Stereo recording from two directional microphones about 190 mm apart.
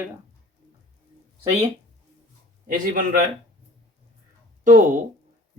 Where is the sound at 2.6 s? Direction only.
50° right (ahead or behind).